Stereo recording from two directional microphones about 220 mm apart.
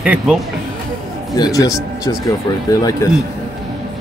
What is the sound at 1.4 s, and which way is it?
Speech, 15° left (ahead or behind).